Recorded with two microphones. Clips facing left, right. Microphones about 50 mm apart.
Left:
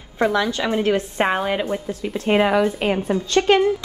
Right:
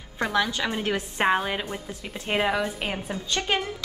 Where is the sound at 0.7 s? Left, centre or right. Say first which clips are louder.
Left 8 dB; left.